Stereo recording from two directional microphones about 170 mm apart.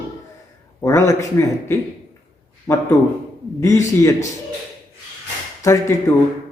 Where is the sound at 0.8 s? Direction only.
15° left (ahead or behind).